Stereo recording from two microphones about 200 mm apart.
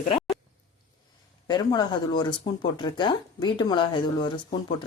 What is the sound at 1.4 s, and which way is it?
Speech, 20° left (ahead or behind).